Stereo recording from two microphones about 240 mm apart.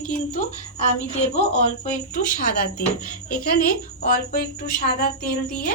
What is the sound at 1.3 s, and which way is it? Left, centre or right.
Speech, left.